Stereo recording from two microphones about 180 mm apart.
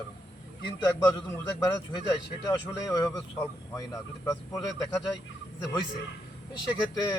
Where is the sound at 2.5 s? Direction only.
20° left (ahead or behind).